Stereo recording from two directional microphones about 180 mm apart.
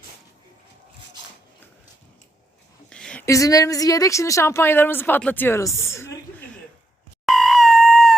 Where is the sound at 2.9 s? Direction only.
5° left (ahead or behind).